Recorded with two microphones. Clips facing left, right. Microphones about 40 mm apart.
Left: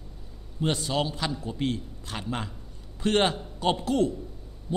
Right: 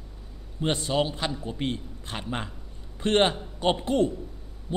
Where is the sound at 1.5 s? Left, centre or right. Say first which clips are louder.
Left 1 dB; centre.